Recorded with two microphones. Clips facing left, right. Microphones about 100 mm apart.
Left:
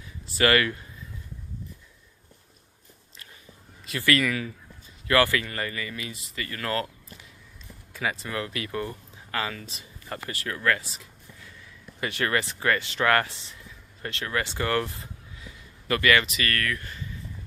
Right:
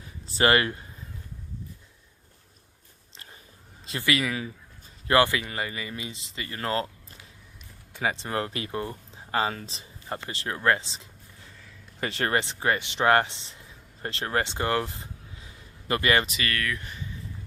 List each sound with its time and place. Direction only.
0.0 s a sound: 30° right (ahead or behind)
4.0 s speech: 15° right (ahead or behind)
7.9 s speech: 30° right (ahead or behind)
16.4 s speech: 20° right (ahead or behind)